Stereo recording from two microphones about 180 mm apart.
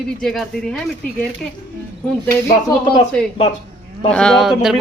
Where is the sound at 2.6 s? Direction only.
30° left (ahead or behind).